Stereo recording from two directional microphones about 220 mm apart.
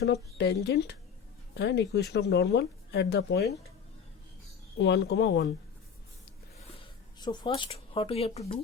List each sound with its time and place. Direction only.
0.0 s speech: 50° left (ahead or behind)
4.8 s speech: 50° left (ahead or behind)
6.6 s a sound: 25° left (ahead or behind)